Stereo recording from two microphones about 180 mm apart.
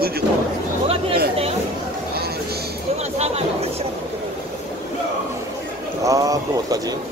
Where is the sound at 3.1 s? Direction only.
35° right (ahead or behind).